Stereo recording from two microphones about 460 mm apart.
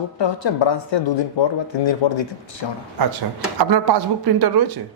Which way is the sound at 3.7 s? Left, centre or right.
Right.